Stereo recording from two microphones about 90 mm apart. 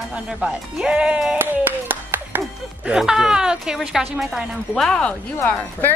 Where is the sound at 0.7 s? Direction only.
10° right (ahead or behind).